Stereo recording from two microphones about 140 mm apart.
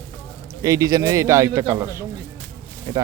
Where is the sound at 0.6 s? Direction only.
25° right (ahead or behind).